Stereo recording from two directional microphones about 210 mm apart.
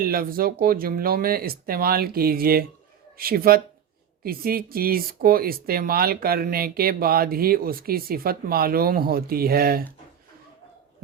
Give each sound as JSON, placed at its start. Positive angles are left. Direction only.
{"t": 0.0, "sound": "speech", "side_deg": -45}